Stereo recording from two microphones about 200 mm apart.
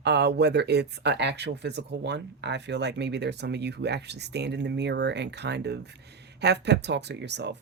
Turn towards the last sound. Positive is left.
turn(degrees=-60)  # may be behind; listen again after turning